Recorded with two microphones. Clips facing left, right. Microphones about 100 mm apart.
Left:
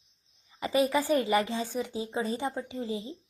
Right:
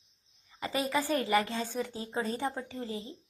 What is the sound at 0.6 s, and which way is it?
A woman's voice, 20° left (ahead or behind).